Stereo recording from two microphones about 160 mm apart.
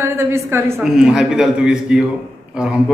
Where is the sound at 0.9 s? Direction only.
5° right (ahead or behind).